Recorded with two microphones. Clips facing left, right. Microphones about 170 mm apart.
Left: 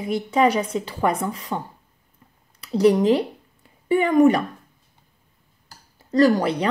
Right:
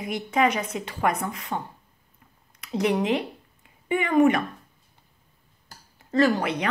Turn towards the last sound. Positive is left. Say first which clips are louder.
# left 4 dB
turn(degrees=35)  # may be behind; listen again after turning